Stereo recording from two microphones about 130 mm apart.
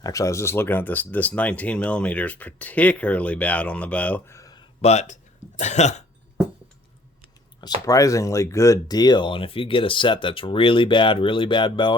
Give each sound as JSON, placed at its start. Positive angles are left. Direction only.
{"t": 0.0, "sound": "speech", "side_deg": 25}
{"t": 4.4, "sound": "a sound", "side_deg": 30}
{"t": 4.8, "sound": "speech", "side_deg": 60}
{"t": 7.6, "sound": "speech", "side_deg": 30}